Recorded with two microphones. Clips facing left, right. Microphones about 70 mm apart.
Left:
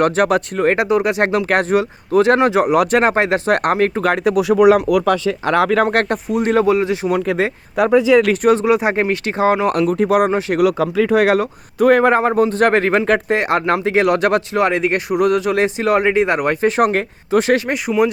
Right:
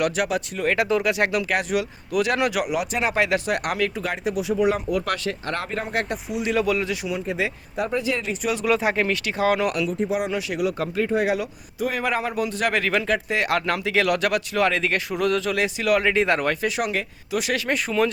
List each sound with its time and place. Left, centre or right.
0.0 s speech: left
0.8 s speech: left
2.7 s speech: left
5.9 s speech: left
6.7 s speech: left
7.1 s speech: left
7.8 s speech: left
8.6 s speech: left
9.9 s speech: left
10.2 s speech: left
10.6 s speech: left
11.3 s speech: left
16.6 s speech: left
17.7 s speech: centre